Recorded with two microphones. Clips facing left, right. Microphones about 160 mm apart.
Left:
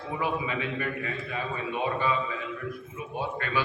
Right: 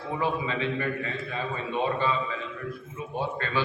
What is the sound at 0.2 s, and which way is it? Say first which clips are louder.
Speech: right 1 dB; 25° right (ahead or behind).